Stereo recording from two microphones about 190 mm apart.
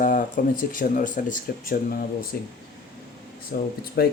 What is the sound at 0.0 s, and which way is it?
Speech, 45° left (ahead or behind).